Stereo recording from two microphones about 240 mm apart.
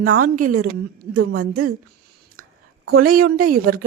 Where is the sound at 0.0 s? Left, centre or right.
Right.